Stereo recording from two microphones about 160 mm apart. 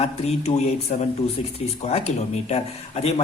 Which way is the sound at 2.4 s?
40° left (ahead or behind).